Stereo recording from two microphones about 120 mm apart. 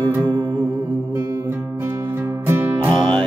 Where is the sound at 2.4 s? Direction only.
20° right (ahead or behind).